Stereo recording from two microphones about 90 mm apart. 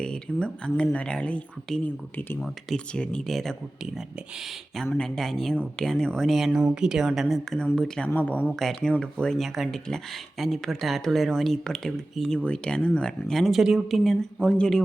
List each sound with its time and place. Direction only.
0.0 s speech: 10° left (ahead or behind)
2.4 s speech: 5° left (ahead or behind)
4.9 s speech: 5° left (ahead or behind)
8.5 s speech: 5° left (ahead or behind)